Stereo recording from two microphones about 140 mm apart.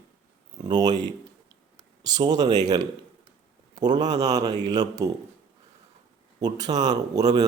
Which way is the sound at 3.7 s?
30° right (ahead or behind).